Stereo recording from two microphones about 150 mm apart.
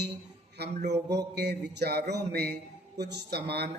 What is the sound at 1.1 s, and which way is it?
A man's voice, 90° right.